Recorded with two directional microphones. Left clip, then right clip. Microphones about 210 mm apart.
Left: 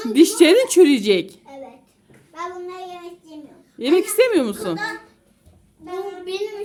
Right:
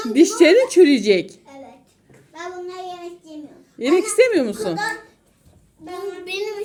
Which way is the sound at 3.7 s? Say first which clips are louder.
Even; 55° left (ahead or behind).